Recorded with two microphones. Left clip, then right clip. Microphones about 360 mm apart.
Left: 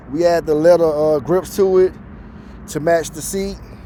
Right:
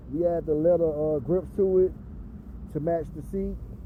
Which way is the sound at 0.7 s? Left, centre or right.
Centre.